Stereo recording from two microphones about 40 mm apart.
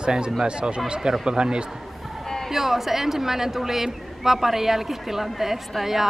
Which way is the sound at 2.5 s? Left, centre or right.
Centre.